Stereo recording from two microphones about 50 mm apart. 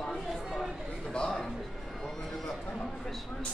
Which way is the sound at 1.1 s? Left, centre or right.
Centre.